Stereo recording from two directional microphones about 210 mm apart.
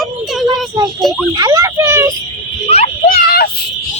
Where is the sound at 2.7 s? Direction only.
35° left (ahead or behind).